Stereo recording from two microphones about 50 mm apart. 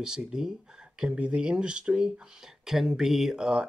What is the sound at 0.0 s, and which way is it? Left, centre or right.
Speech, centre.